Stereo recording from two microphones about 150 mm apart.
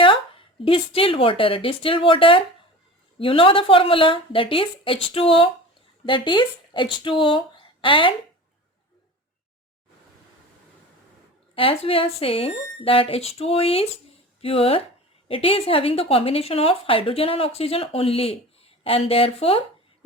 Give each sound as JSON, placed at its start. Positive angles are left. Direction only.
{"t": 0.0, "sound": "a woman's voice", "side_deg": 35}
{"t": 11.5, "sound": "a woman's voice", "side_deg": 40}